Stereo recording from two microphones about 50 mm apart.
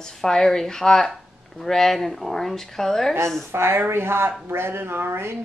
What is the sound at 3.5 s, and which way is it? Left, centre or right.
Speech, right.